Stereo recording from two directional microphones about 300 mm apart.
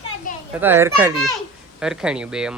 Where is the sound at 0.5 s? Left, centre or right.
Centre.